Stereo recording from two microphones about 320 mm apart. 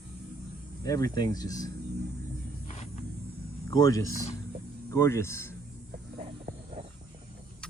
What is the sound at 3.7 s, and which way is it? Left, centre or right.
Speech, centre.